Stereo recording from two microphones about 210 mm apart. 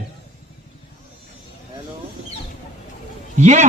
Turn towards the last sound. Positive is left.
turn(degrees=-35)  # may be behind; listen again after turning